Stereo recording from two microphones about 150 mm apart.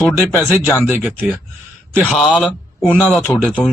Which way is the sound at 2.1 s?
Centre (ahead or behind).